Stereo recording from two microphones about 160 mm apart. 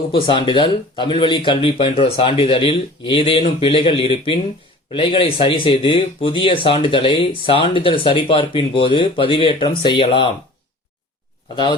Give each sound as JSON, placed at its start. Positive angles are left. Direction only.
{"t": 0.1, "sound": "speech", "side_deg": 30}
{"t": 11.5, "sound": "speech", "side_deg": 30}